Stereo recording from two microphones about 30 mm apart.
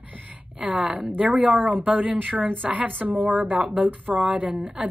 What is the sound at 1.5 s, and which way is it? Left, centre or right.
Speech, right.